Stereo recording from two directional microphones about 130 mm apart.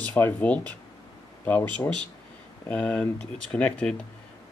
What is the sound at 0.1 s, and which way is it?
Speech, 10° left (ahead or behind).